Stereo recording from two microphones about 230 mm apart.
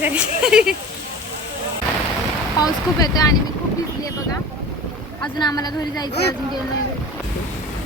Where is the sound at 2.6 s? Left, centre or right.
Centre.